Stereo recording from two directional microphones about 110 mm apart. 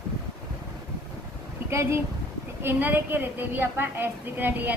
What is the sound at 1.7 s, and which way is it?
A woman's voice, 25° right (ahead or behind).